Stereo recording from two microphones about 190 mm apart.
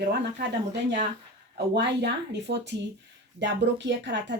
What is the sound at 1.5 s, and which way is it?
A woman's voice, 60° right (ahead or behind).